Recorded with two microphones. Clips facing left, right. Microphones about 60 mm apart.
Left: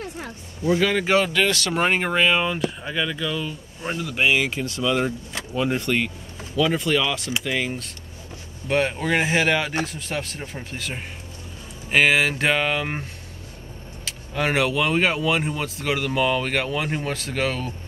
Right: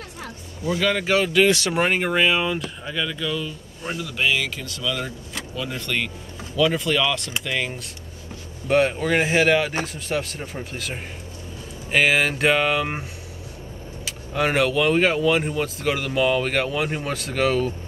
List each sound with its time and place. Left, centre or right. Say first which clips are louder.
0.0 s a sound: left 3 dB; left
0.8 s speech: right 1 dB; centre
1.2 s speech: right 3 dB; centre
1.5 s speech: right 3 dB; right
1.9 s speech: left 1 dB; centre; by 5.9 s left
5.9 s speech: left 3 dB; centre
14.0 s speech: right 1 dB; centre